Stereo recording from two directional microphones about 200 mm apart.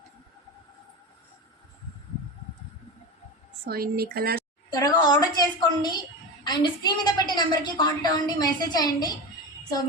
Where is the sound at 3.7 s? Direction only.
50° right (ahead or behind).